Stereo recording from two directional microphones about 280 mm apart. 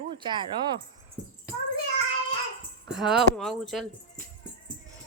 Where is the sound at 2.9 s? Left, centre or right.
Centre.